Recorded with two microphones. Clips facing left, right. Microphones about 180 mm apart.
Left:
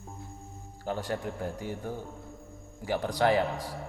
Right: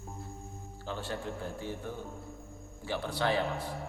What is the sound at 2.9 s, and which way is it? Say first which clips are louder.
Speech: left 5 dB; 40° left (ahead or behind).